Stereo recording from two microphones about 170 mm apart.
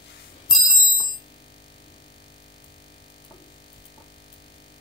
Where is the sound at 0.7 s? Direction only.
15° left (ahead or behind).